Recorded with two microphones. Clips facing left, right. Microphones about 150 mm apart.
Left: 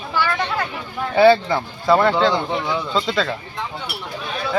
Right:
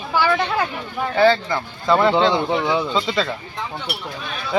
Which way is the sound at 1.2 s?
10° left (ahead or behind).